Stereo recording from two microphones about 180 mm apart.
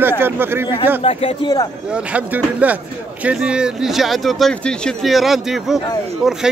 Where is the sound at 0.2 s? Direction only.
10° right (ahead or behind).